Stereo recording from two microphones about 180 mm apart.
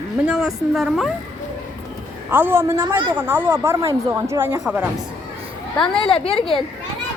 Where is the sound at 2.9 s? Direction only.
25° right (ahead or behind).